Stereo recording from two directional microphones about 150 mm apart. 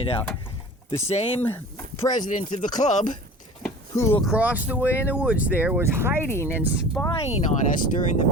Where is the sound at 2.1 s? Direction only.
60° left (ahead or behind).